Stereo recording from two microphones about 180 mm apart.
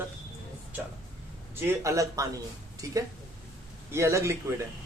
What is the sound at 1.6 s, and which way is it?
A man's voice, 15° right (ahead or behind).